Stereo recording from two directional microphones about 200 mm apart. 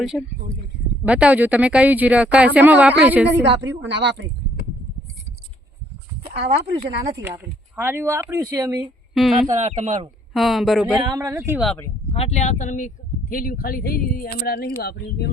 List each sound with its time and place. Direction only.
0.1 s speech: 5° left (ahead or behind)
1.0 s speech: 5° right (ahead or behind)
3.8 s speech: 60° right (ahead or behind)
6.5 s speech: 30° right (ahead or behind)
7.1 s speech: 15° right (ahead or behind)
9.1 s speech: centre (ahead or behind)
9.6 s speech: 35° right (ahead or behind)
10.3 s speech: centre (ahead or behind)
11.1 s speech: 15° right (ahead or behind)
12.1 s speech: 30° left (ahead or behind); by 15.3 s 55° left (ahead or behind)